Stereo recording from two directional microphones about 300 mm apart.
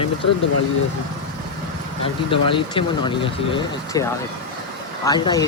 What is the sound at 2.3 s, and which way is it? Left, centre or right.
Speech, centre.